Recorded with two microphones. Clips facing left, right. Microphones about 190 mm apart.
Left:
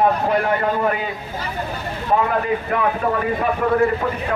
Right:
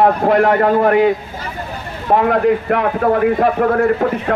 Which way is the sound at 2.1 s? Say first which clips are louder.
Right 6 dB; 60° right (ahead or behind).